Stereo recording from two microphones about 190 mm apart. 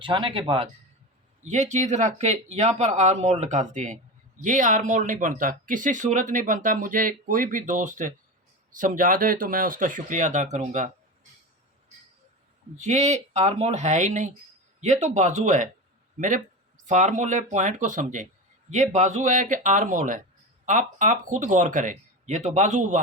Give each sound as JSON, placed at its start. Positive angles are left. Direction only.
{"t": 0.0, "sound": "speech", "side_deg": -25}
{"t": 12.8, "sound": "speech", "side_deg": -35}